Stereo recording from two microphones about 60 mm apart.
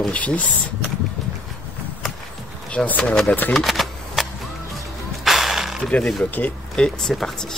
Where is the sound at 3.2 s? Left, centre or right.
Left.